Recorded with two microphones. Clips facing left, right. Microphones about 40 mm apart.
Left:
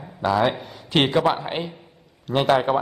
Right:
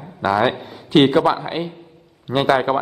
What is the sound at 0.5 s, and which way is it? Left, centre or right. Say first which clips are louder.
A man's voice: right 6 dB; centre.